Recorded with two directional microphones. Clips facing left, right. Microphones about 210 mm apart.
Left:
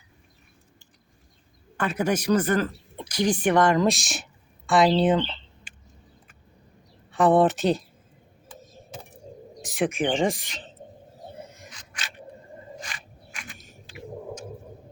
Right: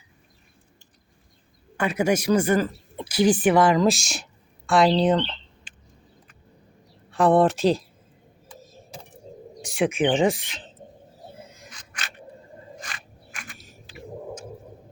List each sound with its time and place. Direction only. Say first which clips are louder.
1.7 s a woman's voice: right 3 dB; 10° right (ahead or behind); by 5.7 s 5° left (ahead or behind)
7.1 s speech: right 1 dB; centre (ahead or behind)
9.6 s speech: right 3 dB; centre (ahead or behind)
11.7 s a sound: right 1 dB; 50° right (ahead or behind)